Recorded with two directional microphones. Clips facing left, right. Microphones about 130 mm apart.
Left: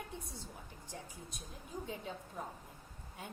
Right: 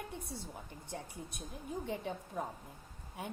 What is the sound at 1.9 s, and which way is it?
Speech, 60° right (ahead or behind).